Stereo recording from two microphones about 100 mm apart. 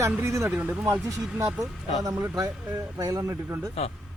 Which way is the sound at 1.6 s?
35° right (ahead or behind).